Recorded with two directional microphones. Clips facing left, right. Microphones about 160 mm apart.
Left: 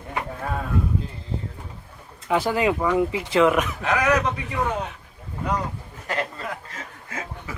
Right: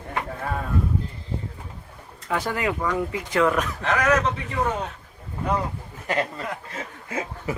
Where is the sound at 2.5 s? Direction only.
20° left (ahead or behind).